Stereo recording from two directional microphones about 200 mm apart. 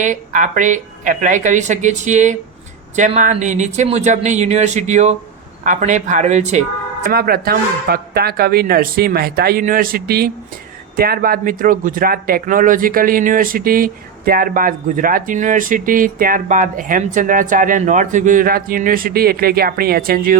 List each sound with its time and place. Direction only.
0.0 s speech: 40° right (ahead or behind)
7.1 s speech: 50° right (ahead or behind)